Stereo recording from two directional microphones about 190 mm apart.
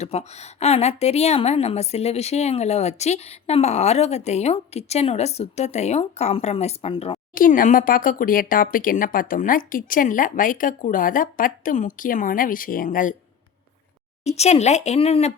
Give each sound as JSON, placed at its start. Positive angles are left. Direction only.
{"t": 0.0, "sound": "a woman's voice", "side_deg": 35}
{"t": 7.3, "sound": "speech", "side_deg": 45}
{"t": 14.3, "sound": "a woman's voice", "side_deg": 35}